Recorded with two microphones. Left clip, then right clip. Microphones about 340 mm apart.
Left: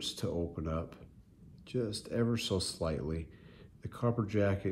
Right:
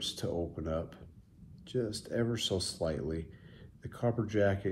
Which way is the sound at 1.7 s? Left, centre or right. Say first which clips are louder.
Right 1 dB; centre.